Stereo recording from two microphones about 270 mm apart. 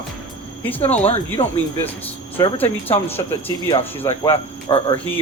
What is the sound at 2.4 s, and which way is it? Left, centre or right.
Speech, centre.